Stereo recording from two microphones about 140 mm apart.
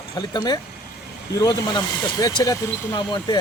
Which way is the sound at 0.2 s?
30° left (ahead or behind).